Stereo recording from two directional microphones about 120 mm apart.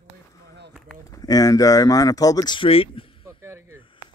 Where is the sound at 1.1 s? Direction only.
30° left (ahead or behind); by 3.1 s 50° left (ahead or behind).